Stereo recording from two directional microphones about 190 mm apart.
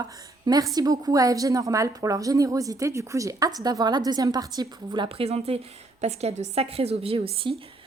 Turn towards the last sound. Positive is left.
turn(degrees=-30)  # may be behind; listen again after turning